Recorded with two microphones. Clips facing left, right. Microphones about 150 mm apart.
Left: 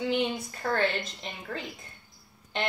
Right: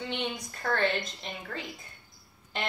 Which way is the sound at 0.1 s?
5° left (ahead or behind).